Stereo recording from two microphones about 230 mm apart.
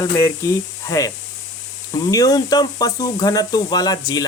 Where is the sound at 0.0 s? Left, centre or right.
Centre.